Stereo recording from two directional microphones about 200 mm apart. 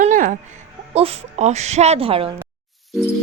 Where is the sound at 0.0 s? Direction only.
40° right (ahead or behind).